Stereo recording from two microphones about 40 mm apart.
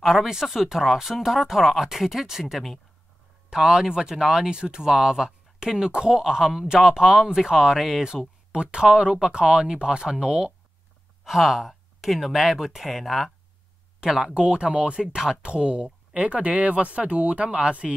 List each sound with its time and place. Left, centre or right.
0.0 s speech: centre
8.8 s speech: right
11.2 s speech: centre
14.0 s speech: centre
15.0 s speech: centre
15.4 s speech: right